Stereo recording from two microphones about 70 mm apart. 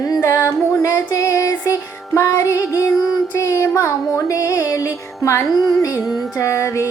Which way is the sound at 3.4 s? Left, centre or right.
Left.